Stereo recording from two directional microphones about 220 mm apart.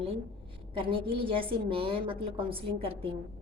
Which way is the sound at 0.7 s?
25° right (ahead or behind).